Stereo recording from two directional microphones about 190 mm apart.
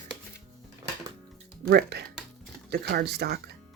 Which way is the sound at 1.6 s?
55° right (ahead or behind).